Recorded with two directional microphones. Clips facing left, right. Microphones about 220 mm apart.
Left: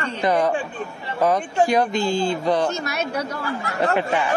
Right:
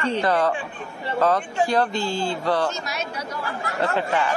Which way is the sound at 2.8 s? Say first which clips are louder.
Left 5 dB; 60° left (ahead or behind).